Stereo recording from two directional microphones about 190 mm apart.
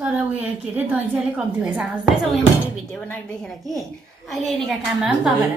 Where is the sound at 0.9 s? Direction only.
5° right (ahead or behind).